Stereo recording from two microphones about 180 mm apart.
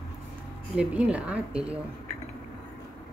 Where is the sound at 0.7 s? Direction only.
5° right (ahead or behind).